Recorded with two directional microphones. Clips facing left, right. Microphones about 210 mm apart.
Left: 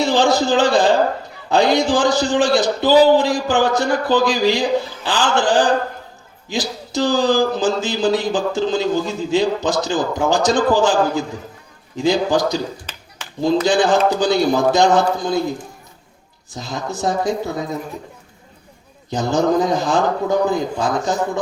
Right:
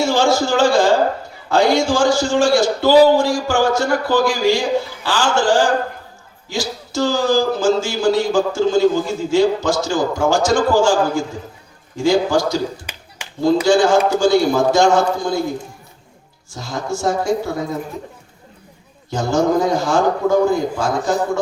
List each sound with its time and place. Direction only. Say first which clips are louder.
0.0 s speech: even; 20° left (ahead or behind)
12.8 s a sound: right 1 dB; 10° right (ahead or behind)
13.7 s speech: right 2 dB; 20° left (ahead or behind)
16.6 s speech: right 1 dB; 20° left (ahead or behind)
19.1 s speech: even; 20° left (ahead or behind)